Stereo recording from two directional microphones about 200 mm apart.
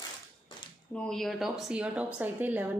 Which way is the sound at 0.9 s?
5° left (ahead or behind).